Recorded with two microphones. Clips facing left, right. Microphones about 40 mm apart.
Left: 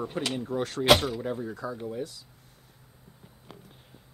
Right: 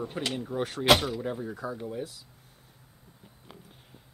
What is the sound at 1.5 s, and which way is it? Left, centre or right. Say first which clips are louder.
Speech: even; centre.